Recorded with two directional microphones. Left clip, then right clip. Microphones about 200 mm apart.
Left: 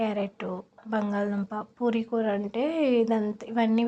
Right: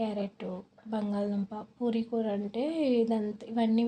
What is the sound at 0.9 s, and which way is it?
A woman's voice, 5° left (ahead or behind).